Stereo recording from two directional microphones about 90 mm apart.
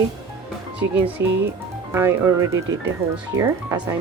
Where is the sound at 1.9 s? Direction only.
25° right (ahead or behind).